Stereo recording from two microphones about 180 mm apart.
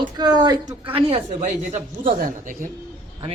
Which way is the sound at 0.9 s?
35° right (ahead or behind).